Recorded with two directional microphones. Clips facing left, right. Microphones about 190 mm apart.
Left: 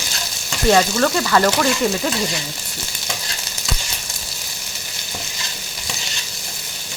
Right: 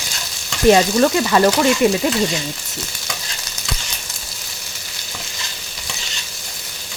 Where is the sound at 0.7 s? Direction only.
15° right (ahead or behind).